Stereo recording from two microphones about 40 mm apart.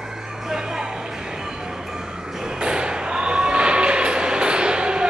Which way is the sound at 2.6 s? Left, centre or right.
Right.